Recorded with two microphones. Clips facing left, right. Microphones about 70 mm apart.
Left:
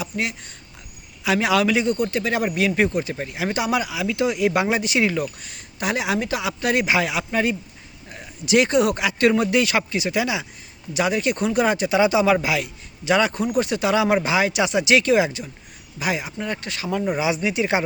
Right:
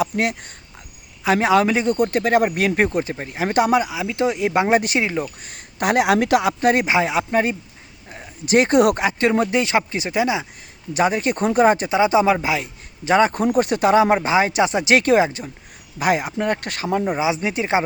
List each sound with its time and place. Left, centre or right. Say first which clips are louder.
0.0 s speech: right 6 dB; right
1.2 s a man's voice: right 3 dB; right
3.8 s speech: right 2 dB; right
4.7 s speech: right 6 dB; right
4.9 s speech: left 1 dB; right
5.5 s speech: right 5 dB; right
6.6 s a man's voice: right 3 dB; right
11.9 s a man's voice: right 1 dB; right
16.8 s speech: right 2 dB; right